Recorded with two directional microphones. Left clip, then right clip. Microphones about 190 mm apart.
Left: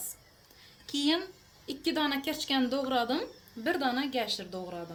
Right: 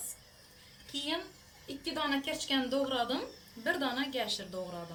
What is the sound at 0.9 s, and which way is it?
A woman's voice, 50° left (ahead or behind).